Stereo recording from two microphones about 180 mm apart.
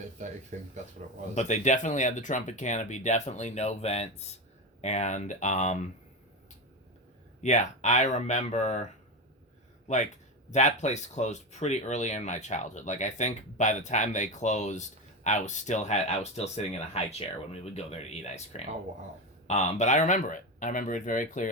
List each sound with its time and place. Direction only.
0.5 s speech: 45° right (ahead or behind)
1.4 s speech: 40° left (ahead or behind)
7.4 s speech: 40° left (ahead or behind)
9.8 s speech: 40° left (ahead or behind)